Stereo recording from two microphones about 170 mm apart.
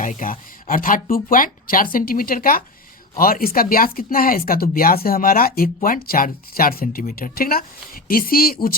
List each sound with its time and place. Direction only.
0.0 s speech: 50° left (ahead or behind)